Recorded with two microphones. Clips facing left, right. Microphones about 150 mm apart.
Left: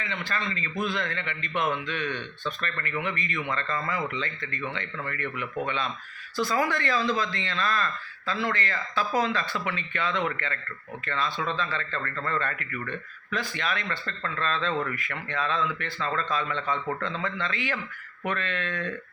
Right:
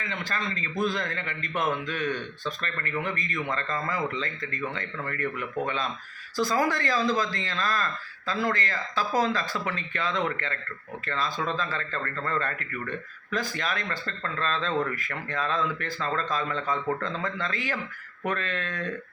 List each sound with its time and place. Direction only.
0.0 s a man's voice: 45° right (ahead or behind)